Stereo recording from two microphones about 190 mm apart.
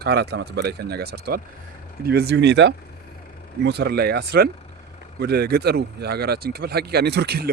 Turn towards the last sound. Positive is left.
turn(degrees=-60)  # may be behind; listen again after turning